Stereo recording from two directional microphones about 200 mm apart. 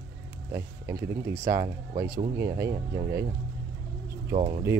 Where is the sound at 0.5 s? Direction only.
15° right (ahead or behind).